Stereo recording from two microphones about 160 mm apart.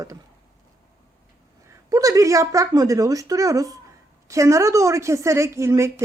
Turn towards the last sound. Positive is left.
turn(degrees=-20)  # may be behind; listen again after turning